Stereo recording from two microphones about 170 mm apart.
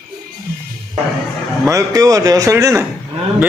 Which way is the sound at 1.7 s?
20° right (ahead or behind).